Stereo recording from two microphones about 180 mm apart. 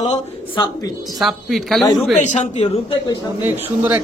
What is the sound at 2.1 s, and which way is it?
Speech, 40° left (ahead or behind).